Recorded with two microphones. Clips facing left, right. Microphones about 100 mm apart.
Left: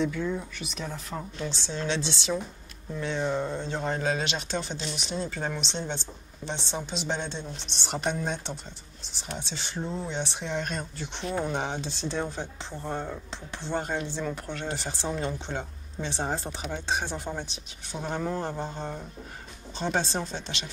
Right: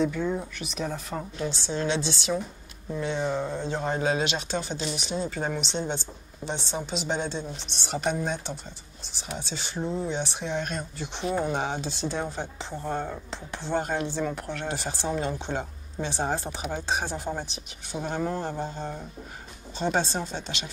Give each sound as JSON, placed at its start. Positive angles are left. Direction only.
{"t": 0.2, "sound": "speech", "side_deg": -25}
{"t": 0.7, "sound": "speech", "side_deg": -5}